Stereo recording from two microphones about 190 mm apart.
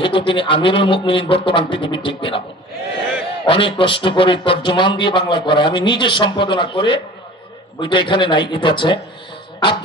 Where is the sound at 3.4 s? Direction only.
25° left (ahead or behind).